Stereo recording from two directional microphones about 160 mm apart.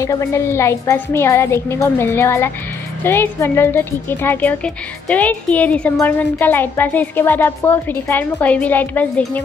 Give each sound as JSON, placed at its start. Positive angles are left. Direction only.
{"t": 0.0, "sound": "speech", "side_deg": 20}